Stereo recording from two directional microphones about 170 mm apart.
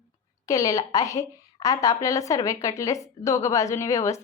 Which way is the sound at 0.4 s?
20° left (ahead or behind).